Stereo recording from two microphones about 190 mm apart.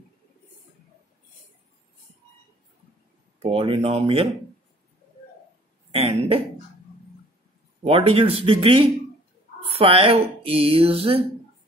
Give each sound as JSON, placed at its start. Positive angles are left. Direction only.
{"t": 3.4, "sound": "speech", "side_deg": -30}
{"t": 5.9, "sound": "a sound", "side_deg": -30}
{"t": 7.8, "sound": "speech", "side_deg": -30}